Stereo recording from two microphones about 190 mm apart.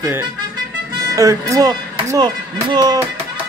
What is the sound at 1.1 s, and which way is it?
Speech, 15° right (ahead or behind).